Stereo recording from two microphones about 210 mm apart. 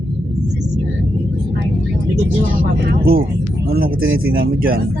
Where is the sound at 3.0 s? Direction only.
45° right (ahead or behind).